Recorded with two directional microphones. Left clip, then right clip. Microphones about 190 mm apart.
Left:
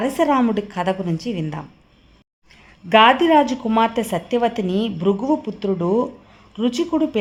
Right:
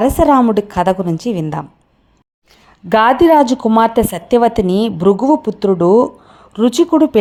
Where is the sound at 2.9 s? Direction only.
20° right (ahead or behind).